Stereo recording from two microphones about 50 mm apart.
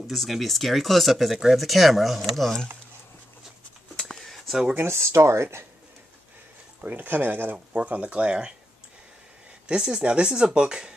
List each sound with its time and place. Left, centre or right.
0.0 s speech: centre
4.5 s speech: centre
4.7 s speech: right
6.8 s speech: right
7.1 s speech: right
7.5 s speech: right
9.7 s speech: centre